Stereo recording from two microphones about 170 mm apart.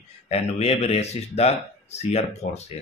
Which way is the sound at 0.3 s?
35° left (ahead or behind).